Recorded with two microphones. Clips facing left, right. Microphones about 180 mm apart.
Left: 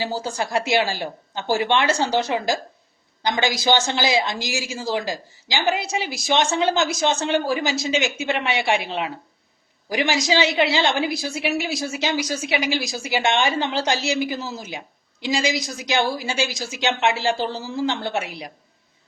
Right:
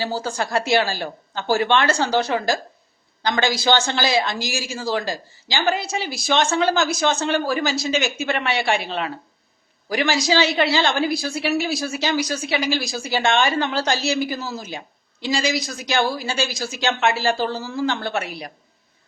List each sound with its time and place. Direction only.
0.0 s a woman's voice: 20° left (ahead or behind)